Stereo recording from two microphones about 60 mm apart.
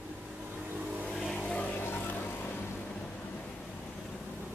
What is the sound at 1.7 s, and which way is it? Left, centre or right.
Music, left.